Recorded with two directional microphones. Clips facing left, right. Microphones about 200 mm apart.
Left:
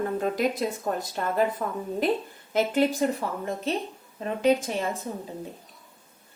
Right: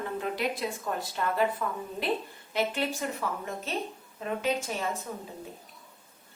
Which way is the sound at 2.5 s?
40° left (ahead or behind).